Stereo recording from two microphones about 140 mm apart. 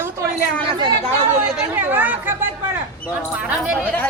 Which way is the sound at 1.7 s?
15° right (ahead or behind).